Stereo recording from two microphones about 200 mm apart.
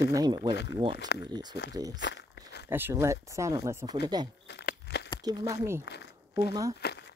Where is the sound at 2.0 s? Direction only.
60° left (ahead or behind).